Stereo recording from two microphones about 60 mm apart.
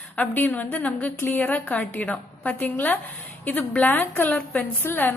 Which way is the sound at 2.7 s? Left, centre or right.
Left.